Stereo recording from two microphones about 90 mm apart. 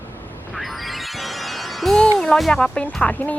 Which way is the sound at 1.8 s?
5° left (ahead or behind).